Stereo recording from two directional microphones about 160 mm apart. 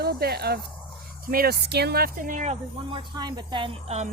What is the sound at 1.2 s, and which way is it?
Speech, 65° right (ahead or behind).